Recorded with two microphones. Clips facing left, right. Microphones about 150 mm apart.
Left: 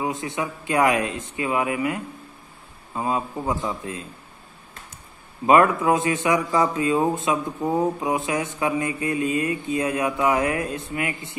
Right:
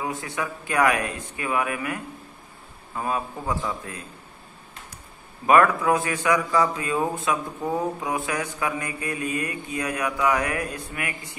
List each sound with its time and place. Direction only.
0.0 s a man's voice: 20° left (ahead or behind)
5.5 s a man's voice: 20° left (ahead or behind)